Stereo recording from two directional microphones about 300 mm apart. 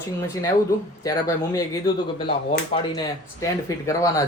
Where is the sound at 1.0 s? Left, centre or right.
Centre.